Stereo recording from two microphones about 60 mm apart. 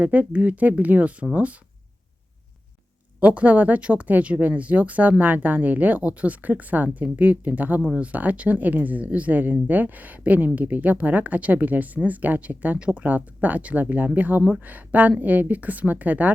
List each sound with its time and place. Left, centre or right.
0.0 s speech: right
3.2 s speech: right
7.8 s speech: centre